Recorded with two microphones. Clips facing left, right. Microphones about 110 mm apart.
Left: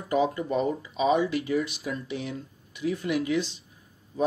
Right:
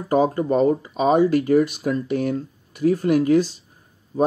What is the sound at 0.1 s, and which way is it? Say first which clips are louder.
Speech: right 6 dB; 45° right (ahead or behind).